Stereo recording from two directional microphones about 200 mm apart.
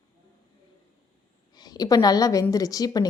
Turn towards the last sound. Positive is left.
turn(degrees=20)  # may be behind; listen again after turning